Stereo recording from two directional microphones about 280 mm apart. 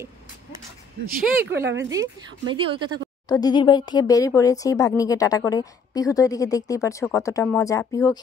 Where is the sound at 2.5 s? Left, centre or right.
Centre.